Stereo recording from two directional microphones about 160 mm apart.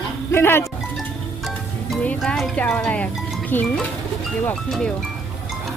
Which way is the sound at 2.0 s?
10° left (ahead or behind).